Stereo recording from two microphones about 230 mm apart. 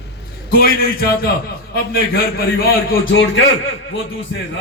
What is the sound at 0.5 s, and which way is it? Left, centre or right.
A man's voice, left.